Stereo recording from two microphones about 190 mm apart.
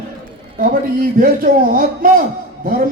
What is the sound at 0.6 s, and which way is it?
A man's voice, 50° right (ahead or behind).